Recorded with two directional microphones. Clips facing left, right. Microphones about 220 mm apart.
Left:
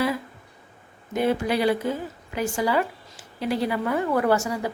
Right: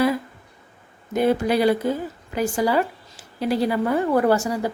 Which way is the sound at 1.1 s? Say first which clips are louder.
Right 4 dB; 40° right (ahead or behind).